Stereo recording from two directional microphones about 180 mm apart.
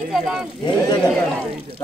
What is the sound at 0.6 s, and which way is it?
Speech, 25° left (ahead or behind).